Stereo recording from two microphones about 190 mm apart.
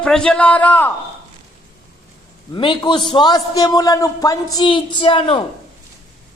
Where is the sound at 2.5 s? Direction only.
25° left (ahead or behind).